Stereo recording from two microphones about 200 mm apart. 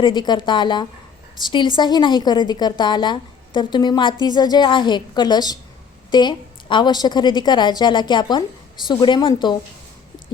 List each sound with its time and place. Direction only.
0.0 s a woman's voice: 20° left (ahead or behind)